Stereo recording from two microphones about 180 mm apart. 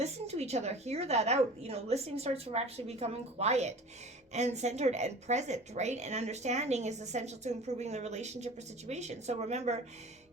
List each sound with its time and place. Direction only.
0.0 s a woman's voice: 35° right (ahead or behind)